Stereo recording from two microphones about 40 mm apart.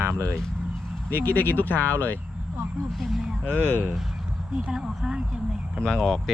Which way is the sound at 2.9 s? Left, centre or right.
Centre.